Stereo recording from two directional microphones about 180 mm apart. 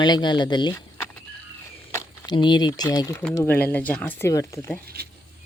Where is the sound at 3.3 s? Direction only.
10° left (ahead or behind).